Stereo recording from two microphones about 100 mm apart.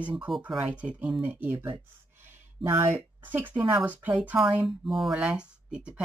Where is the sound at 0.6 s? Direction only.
15° right (ahead or behind).